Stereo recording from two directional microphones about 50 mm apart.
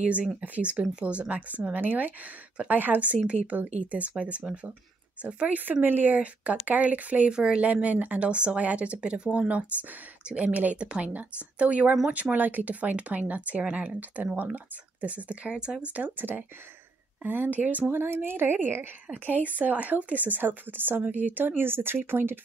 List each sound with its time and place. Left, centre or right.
0.0 s speech: right
1.7 s speech: right
5.7 s speech: right
6.1 s speech: right
7.2 s speech: centre
7.6 s speech: right
15.5 s speech: centre
15.8 s speech: right
17.9 s a woman's voice: right
19.1 s speech: right